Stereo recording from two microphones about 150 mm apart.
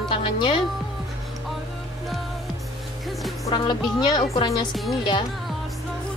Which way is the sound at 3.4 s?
30° left (ahead or behind).